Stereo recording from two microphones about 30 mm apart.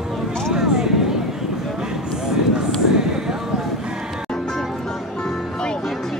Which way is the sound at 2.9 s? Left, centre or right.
Right.